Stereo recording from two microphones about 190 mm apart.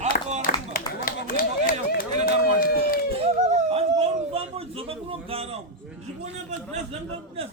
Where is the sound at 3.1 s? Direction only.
30° right (ahead or behind).